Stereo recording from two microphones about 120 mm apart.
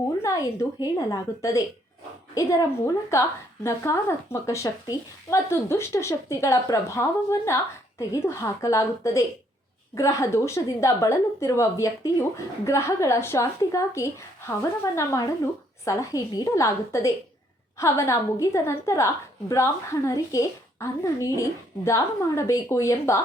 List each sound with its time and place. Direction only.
0.2 s a woman's voice: 25° left (ahead or behind)